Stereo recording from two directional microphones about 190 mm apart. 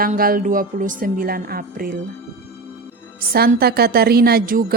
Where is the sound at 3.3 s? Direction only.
55° right (ahead or behind).